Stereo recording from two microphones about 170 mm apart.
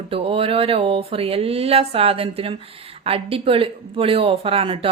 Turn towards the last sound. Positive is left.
turn(degrees=-30)  # may be behind; listen again after turning